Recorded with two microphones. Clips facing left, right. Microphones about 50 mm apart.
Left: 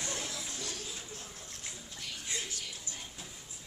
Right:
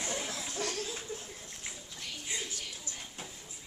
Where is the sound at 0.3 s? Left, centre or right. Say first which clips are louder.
Right 5 dB; right.